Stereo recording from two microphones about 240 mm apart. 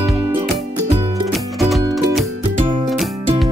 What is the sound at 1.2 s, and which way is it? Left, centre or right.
Music, centre.